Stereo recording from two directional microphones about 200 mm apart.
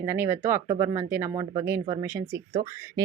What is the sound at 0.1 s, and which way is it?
Speech, 10° right (ahead or behind).